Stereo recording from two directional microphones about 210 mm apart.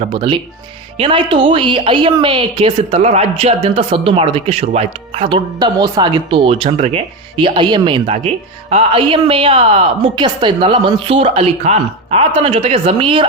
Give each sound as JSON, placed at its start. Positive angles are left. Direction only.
{"t": 0.0, "sound": "a woman's voice", "side_deg": -25}